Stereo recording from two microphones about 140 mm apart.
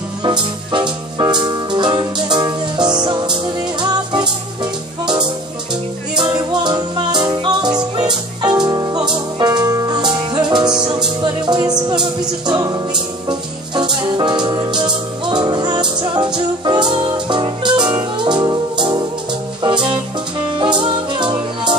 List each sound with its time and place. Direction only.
0.2 s music: 30° right (ahead or behind)
6.2 s music: 30° right (ahead or behind)